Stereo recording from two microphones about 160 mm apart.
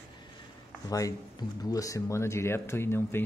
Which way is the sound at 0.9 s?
20° left (ahead or behind).